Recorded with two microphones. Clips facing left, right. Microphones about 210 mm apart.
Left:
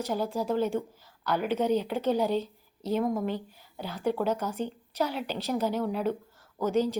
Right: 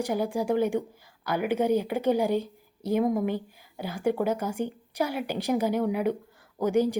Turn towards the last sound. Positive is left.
turn(degrees=-15)  # may be behind; listen again after turning